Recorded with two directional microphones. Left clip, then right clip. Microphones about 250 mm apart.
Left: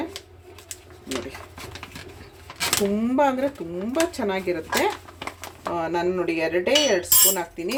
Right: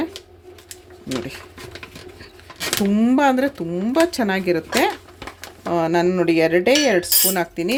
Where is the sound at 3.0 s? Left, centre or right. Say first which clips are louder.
Right 7 dB; right.